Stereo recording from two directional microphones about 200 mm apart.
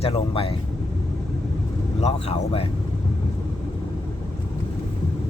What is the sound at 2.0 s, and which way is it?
Speech, 30° left (ahead or behind).